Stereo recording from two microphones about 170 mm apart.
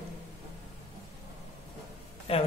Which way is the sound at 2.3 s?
35° left (ahead or behind).